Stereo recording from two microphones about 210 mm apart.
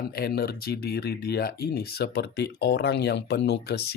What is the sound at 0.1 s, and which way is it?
Speech, 50° left (ahead or behind).